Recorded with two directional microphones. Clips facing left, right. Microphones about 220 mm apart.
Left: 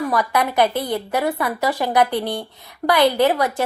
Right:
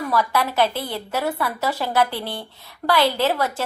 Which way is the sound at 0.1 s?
15° left (ahead or behind).